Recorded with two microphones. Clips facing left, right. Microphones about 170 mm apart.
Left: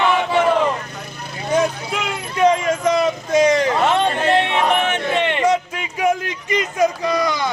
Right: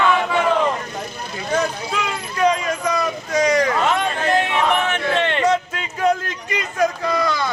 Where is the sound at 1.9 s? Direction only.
20° left (ahead or behind).